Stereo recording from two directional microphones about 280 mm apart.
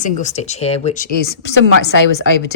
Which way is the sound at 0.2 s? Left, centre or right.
Left.